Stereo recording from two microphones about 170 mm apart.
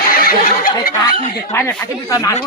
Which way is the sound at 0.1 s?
60° left (ahead or behind).